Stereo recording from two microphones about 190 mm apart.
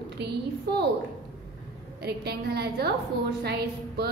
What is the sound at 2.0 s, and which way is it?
A woman's voice, 60° right (ahead or behind).